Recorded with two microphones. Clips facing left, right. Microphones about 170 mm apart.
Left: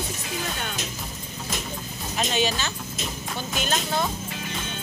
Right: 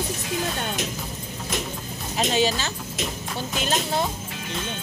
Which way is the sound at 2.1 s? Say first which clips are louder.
Right 3 dB; 35° right (ahead or behind).